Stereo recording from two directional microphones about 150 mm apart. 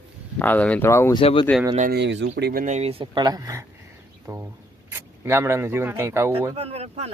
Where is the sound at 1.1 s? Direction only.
35° left (ahead or behind).